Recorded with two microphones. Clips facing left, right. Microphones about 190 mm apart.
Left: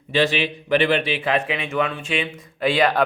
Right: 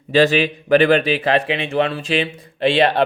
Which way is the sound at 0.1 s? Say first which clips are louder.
Right 6 dB; 40° right (ahead or behind).